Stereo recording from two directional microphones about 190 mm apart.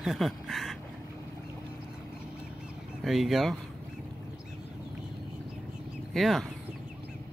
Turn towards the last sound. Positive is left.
turn(degrees=0)  # may be behind; listen again after turning